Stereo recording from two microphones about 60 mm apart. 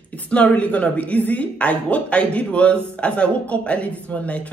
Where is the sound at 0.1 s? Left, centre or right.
Left.